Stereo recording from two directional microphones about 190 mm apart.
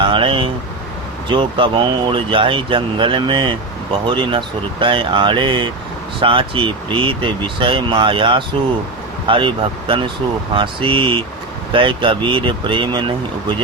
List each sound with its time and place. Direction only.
0.0 s speech: 25° right (ahead or behind)